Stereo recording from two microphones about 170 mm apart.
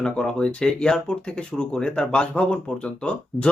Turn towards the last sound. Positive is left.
turn(degrees=5)  # may be behind; listen again after turning